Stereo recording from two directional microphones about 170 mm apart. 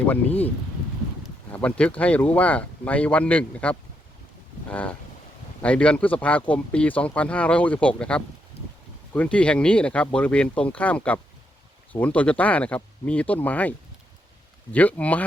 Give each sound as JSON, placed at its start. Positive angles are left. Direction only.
{"t": 0.1, "sound": "speech", "side_deg": 10}
{"t": 1.5, "sound": "speech", "side_deg": 10}